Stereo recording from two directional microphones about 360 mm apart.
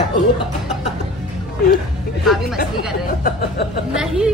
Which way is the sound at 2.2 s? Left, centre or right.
Centre.